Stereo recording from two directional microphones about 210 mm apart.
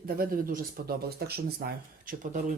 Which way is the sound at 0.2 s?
45° right (ahead or behind).